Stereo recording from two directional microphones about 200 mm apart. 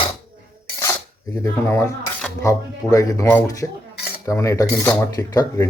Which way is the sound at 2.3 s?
15° left (ahead or behind).